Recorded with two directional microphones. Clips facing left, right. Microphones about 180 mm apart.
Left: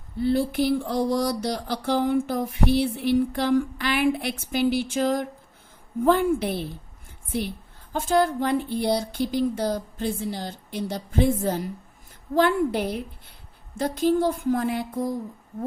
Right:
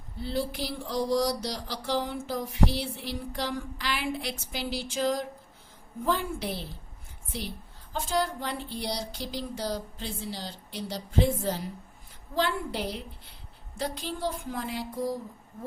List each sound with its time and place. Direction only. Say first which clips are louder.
0.2 s mantra: left 9 dB; 55° left (ahead or behind)
6.1 s a woman's voice: left 9 dB; 55° left (ahead or behind)
7.9 s mantra: left 7 dB; 50° left (ahead or behind)